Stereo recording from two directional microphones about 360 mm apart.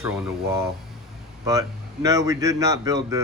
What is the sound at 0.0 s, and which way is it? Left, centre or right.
Speech, centre.